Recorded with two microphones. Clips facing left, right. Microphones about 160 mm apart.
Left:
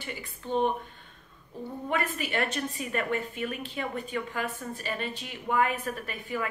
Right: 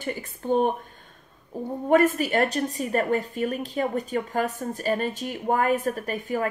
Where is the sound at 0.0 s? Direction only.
45° right (ahead or behind).